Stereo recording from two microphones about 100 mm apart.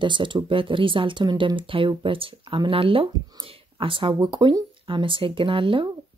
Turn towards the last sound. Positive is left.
turn(degrees=-60)  # may be behind; listen again after turning